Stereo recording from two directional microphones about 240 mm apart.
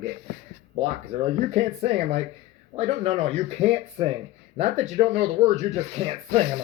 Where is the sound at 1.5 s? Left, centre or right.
Right.